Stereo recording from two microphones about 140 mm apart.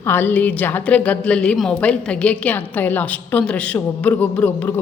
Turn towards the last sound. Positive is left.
turn(degrees=10)  # may be behind; listen again after turning